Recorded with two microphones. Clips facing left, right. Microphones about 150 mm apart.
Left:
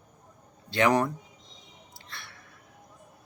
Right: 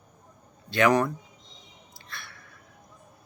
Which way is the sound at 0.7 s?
25° left (ahead or behind).